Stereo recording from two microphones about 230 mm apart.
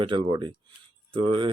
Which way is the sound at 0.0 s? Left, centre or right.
Right.